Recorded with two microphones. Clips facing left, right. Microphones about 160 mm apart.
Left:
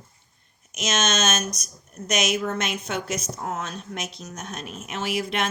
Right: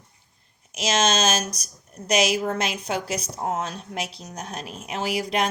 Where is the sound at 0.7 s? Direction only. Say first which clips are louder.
Right 3 dB; 30° right (ahead or behind).